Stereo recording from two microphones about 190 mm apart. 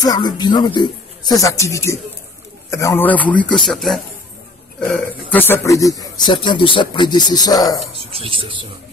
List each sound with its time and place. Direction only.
0.0 s a man's voice: 20° left (ahead or behind)
7.9 s speech: 30° right (ahead or behind)